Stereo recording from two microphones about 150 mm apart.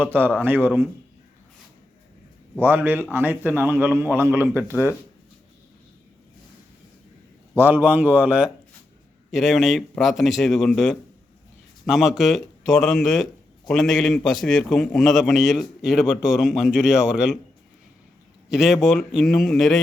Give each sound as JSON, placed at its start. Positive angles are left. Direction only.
{"t": 0.0, "sound": "a man's voice", "side_deg": -15}
{"t": 2.6, "sound": "a man's voice", "side_deg": -15}
{"t": 4.7, "sound": "speech", "side_deg": 15}
{"t": 7.5, "sound": "a man's voice", "side_deg": -15}
{"t": 18.4, "sound": "a man's voice", "side_deg": 0}